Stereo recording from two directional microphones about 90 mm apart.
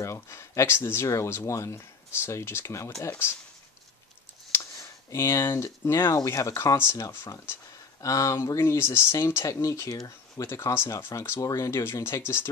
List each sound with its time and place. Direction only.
0.0 s speech: 30° left (ahead or behind)
5.1 s speech: 30° left (ahead or behind)
8.0 s speech: 40° left (ahead or behind)